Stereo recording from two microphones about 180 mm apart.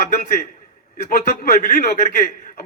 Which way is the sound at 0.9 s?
50° left (ahead or behind).